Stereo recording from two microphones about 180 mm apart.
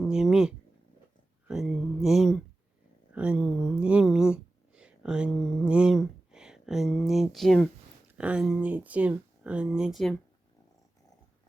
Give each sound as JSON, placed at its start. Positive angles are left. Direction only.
{"t": 0.0, "sound": "speech", "side_deg": 0}
{"t": 1.5, "sound": "a sound", "side_deg": 0}
{"t": 8.2, "sound": "speech", "side_deg": -5}